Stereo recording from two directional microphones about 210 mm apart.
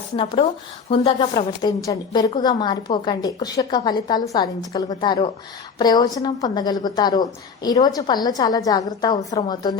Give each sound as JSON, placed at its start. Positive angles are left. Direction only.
{"t": 0.9, "sound": "a woman's voice", "side_deg": 25}